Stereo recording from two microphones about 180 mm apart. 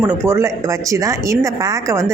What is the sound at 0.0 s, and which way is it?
Speech, 15° right (ahead or behind).